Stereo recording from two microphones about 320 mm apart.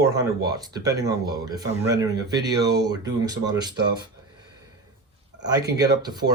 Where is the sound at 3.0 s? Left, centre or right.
Centre.